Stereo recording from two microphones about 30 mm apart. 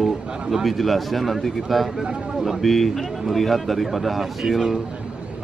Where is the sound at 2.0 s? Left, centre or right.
Right.